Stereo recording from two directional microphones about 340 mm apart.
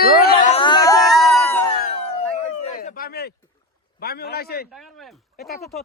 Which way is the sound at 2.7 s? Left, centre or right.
Left.